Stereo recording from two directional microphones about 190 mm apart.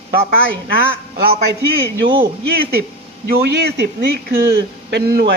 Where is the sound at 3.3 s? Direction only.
55° right (ahead or behind).